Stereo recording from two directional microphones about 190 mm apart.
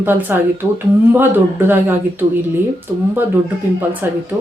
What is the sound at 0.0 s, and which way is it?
Speech, 10° right (ahead or behind).